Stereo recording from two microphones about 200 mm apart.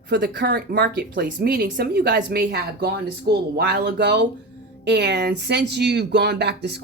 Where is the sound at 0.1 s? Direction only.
45° right (ahead or behind).